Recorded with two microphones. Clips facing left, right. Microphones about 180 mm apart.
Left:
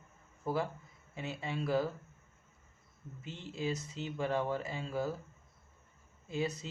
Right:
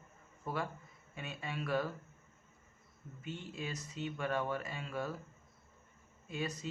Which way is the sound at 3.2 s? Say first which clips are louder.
Left 5 dB; 25° left (ahead or behind).